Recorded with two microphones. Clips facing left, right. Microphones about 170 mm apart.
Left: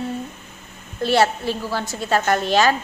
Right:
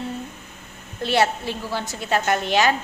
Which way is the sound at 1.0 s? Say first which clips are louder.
Left 3 dB; 15° right (ahead or behind).